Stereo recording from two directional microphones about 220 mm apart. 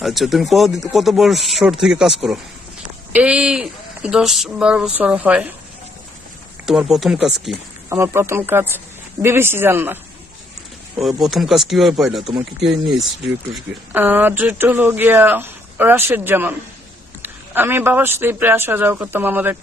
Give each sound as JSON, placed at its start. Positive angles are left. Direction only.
{"t": 0.0, "sound": "speech", "side_deg": 0}
{"t": 6.6, "sound": "speech", "side_deg": 0}
{"t": 7.9, "sound": "speech", "side_deg": -10}
{"t": 11.0, "sound": "speech", "side_deg": 0}